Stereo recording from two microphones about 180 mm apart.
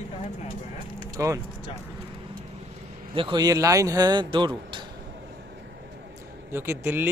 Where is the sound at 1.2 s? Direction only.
15° right (ahead or behind).